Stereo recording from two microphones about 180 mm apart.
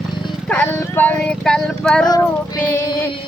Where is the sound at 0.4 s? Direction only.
5° left (ahead or behind).